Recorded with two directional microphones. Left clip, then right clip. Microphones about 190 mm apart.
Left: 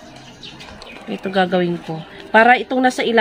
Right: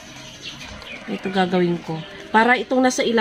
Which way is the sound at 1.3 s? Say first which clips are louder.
Left 3 dB; 25° left (ahead or behind).